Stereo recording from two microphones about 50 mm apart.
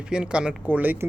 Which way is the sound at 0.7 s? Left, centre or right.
Right.